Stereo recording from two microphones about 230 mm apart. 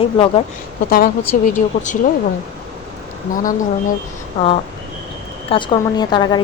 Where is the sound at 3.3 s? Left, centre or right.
Left.